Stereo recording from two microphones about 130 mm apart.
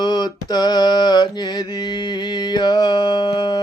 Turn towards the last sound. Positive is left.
turn(degrees=30)  # may be behind; listen again after turning